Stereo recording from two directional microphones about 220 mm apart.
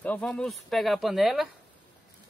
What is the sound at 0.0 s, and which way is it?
Speech, 5° left (ahead or behind).